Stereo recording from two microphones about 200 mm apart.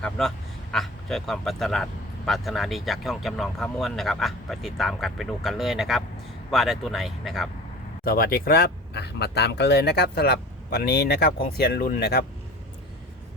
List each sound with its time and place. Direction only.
0.0 s speech: 5° left (ahead or behind)
8.0 s speech: 45° left (ahead or behind)